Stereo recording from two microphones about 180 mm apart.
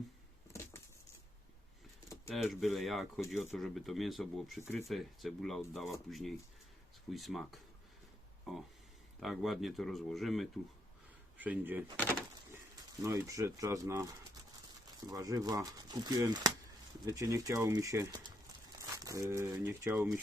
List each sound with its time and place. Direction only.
0.5 s a sound: 15° left (ahead or behind)
2.3 s speech: centre (ahead or behind)
4.6 s speech: 15° left (ahead or behind)
4.9 s speech: centre (ahead or behind)
9.2 s speech: centre (ahead or behind)
13.0 s speech: 15° right (ahead or behind)
18.8 s crumpling: 20° right (ahead or behind)
19.5 s speech: 15° right (ahead or behind)